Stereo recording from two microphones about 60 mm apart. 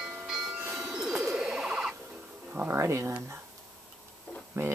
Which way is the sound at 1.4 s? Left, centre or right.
Centre.